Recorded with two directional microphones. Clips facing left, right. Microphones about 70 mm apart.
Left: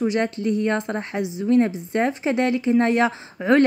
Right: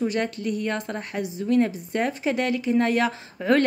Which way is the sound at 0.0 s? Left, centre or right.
Left.